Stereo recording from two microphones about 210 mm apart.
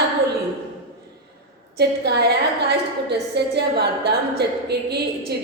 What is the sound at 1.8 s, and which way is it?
A woman's voice, 50° right (ahead or behind).